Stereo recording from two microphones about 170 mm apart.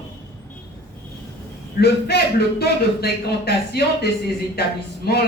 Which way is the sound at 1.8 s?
70° left (ahead or behind).